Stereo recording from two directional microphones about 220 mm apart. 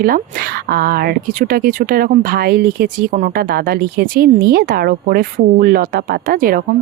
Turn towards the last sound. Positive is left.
turn(degrees=-40)  # may be behind; listen again after turning